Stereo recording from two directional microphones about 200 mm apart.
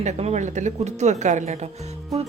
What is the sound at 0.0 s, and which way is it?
Speech, 35° right (ahead or behind).